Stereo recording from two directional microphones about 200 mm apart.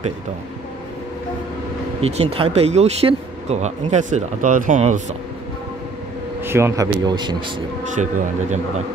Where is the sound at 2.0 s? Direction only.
30° right (ahead or behind).